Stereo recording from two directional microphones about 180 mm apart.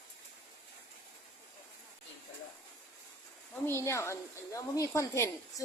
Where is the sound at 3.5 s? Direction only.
15° left (ahead or behind).